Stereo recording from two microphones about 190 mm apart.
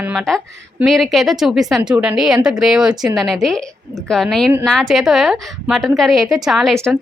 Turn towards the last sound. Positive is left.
turn(degrees=0)  # may be behind; listen again after turning